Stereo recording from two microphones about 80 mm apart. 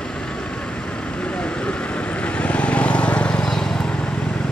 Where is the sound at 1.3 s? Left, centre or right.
Centre.